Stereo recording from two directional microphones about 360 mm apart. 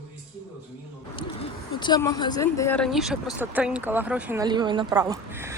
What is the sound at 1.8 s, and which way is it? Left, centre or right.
Speech, centre.